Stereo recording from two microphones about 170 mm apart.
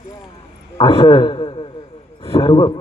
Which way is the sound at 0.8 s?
30° left (ahead or behind).